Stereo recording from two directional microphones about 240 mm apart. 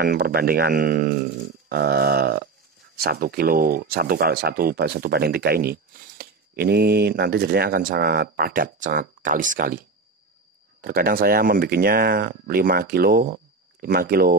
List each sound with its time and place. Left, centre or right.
0.0 s speech: right